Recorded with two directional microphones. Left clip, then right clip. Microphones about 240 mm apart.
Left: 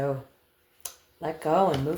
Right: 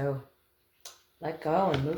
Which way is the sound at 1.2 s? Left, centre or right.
Left.